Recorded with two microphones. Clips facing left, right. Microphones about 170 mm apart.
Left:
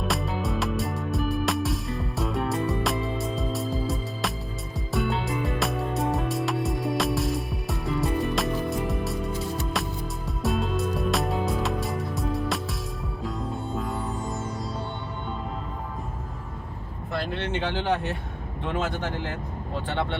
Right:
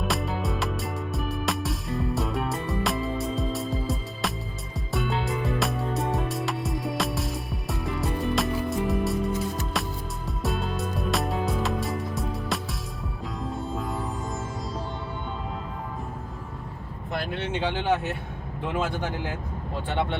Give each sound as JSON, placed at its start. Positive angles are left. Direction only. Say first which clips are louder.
{"t": 0.1, "sound": "music", "louder": "even", "side_deg": 0}
{"t": 13.7, "sound": "music", "louder": "left 3 dB", "side_deg": 0}
{"t": 17.1, "sound": "vehicle", "louder": "left 1 dB", "side_deg": -15}
{"t": 18.7, "sound": "speech", "louder": "even", "side_deg": -10}